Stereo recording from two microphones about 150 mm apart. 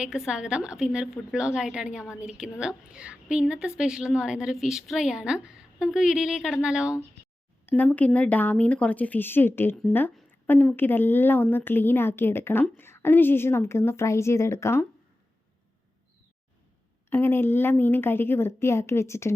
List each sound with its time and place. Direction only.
0.0 s a woman's voice: 5° right (ahead or behind)
7.7 s a woman's voice: 10° left (ahead or behind)
17.1 s a woman's voice: 15° left (ahead or behind)